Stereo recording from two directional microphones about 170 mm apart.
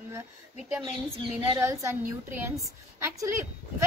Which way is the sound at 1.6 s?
15° right (ahead or behind).